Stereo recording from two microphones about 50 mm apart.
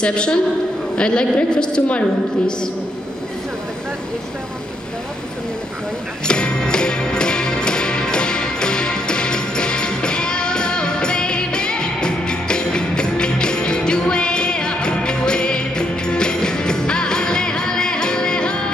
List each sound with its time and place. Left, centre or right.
0.0 s a woman's voice: centre
6.2 s music: centre